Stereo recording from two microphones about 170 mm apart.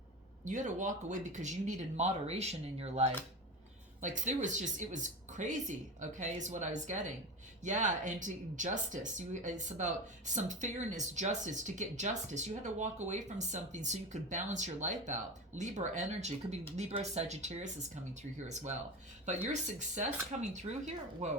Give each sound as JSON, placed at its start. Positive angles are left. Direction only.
{"t": 0.4, "sound": "speech", "side_deg": -45}